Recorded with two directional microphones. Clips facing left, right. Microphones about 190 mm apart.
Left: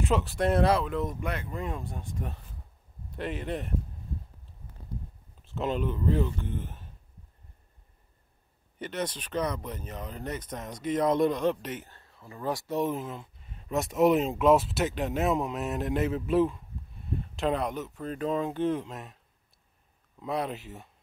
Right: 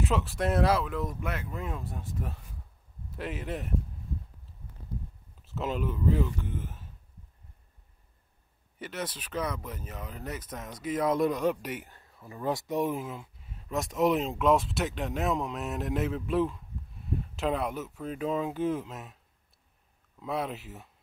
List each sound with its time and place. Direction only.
0.0 s speech: centre (ahead or behind)
5.4 s speech: 5° right (ahead or behind)
8.7 s speech: 5° right (ahead or behind)
20.2 s speech: centre (ahead or behind)